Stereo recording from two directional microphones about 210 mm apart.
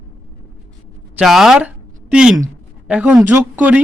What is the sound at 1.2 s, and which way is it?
A man's voice, centre (ahead or behind).